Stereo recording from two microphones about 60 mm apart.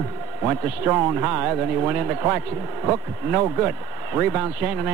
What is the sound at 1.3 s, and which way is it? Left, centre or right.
A man's voice, right.